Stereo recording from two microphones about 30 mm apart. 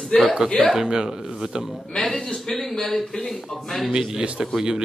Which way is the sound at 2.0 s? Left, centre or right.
Centre.